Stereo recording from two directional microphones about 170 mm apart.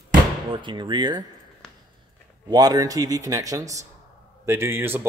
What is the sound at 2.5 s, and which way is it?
A man's voice, 20° right (ahead or behind).